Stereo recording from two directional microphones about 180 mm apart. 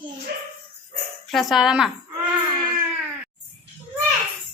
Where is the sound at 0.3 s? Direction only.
55° right (ahead or behind).